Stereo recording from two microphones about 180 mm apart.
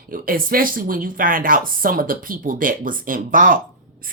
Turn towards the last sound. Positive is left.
turn(degrees=-50)  # may be behind; listen again after turning